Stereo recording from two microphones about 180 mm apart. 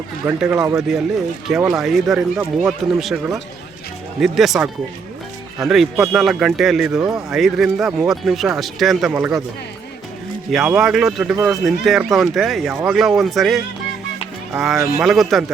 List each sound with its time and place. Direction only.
0.3 s speech: 5° right (ahead or behind)
4.2 s speech: centre (ahead or behind)
10.5 s speech: centre (ahead or behind)